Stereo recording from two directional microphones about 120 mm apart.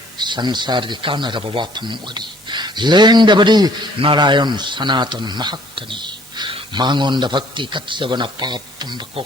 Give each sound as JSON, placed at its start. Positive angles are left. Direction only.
{"t": 0.2, "sound": "a man's voice", "side_deg": -40}